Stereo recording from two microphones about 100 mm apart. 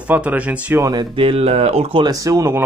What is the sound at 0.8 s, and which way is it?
Speech, 40° right (ahead or behind).